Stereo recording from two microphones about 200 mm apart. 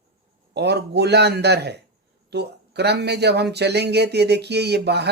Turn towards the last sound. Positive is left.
turn(degrees=-55)  # may be behind; listen again after turning